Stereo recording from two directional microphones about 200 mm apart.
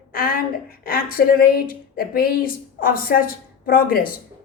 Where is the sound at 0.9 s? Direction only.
45° left (ahead or behind).